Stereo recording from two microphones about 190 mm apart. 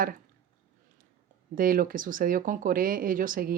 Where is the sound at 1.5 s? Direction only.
50° right (ahead or behind).